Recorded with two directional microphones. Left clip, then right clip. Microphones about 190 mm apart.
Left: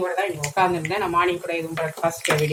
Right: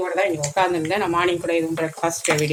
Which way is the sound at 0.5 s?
45° right (ahead or behind).